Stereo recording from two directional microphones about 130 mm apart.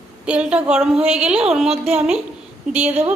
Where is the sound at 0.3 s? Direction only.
10° right (ahead or behind).